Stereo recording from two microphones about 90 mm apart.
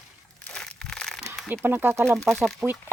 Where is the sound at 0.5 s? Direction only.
5° left (ahead or behind).